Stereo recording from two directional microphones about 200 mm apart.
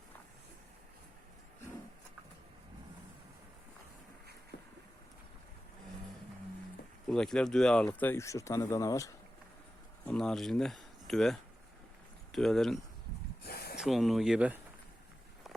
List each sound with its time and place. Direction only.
7.1 s speech: 5° left (ahead or behind)
10.1 s speech: 5° left (ahead or behind)
13.4 s a sound: 50° left (ahead or behind)
13.7 s speech: centre (ahead or behind)